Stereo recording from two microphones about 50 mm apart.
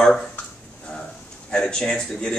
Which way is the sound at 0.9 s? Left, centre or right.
Centre.